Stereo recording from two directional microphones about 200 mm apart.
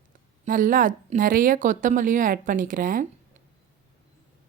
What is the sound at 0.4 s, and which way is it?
A woman's voice, 45° right (ahead or behind).